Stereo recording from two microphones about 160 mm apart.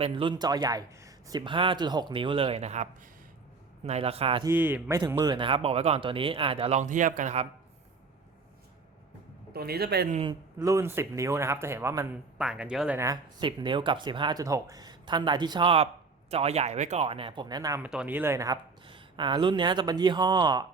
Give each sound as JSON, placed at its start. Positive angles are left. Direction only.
{"t": 0.0, "sound": "speech", "side_deg": -30}
{"t": 4.4, "sound": "speech", "side_deg": -10}
{"t": 4.9, "sound": "speech", "side_deg": -25}
{"t": 9.5, "sound": "speech", "side_deg": -80}
{"t": 10.6, "sound": "speech", "side_deg": -20}
{"t": 12.4, "sound": "speech", "side_deg": -5}
{"t": 13.4, "sound": "speech", "side_deg": -30}
{"t": 17.7, "sound": "speech", "side_deg": -10}